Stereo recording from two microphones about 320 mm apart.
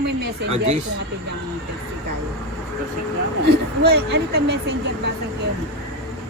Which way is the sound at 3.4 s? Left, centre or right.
Right.